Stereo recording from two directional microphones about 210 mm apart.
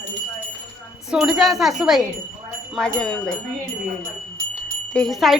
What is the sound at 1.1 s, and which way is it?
Speech, centre (ahead or behind).